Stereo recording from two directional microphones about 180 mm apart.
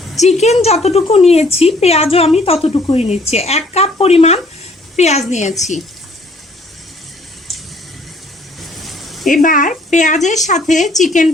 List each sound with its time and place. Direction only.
0.2 s speech: 40° left (ahead or behind)
8.8 s a sound: centre (ahead or behind)
9.3 s speech: 45° left (ahead or behind)